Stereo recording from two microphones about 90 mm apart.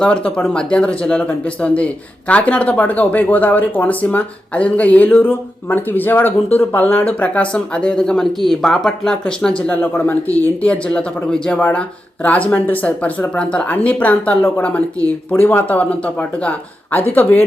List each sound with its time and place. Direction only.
0.0 s speech: 10° left (ahead or behind)
9.6 s speech: 20° left (ahead or behind)